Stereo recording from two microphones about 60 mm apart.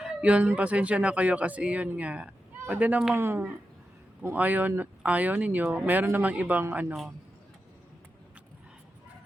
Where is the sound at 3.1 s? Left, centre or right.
Right.